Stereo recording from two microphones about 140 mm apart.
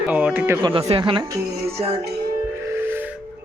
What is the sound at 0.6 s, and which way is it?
Speech, 40° right (ahead or behind).